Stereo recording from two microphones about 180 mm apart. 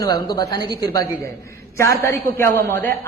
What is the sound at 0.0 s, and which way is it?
A woman's voice, 20° left (ahead or behind).